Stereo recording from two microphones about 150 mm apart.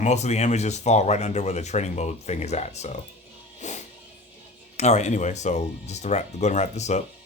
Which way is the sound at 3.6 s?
50° left (ahead or behind).